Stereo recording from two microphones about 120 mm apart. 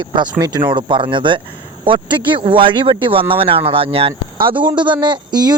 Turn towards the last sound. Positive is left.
turn(degrees=-35)  # may be behind; listen again after turning